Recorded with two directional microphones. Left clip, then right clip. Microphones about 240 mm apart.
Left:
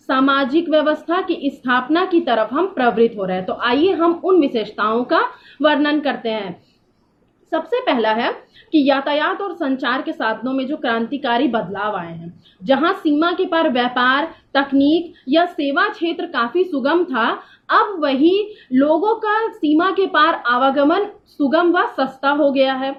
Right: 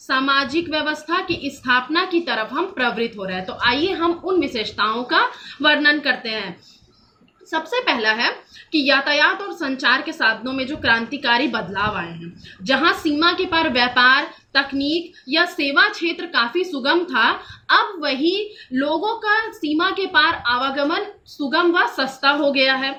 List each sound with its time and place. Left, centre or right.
0.1 s speech: centre
7.5 s speech: centre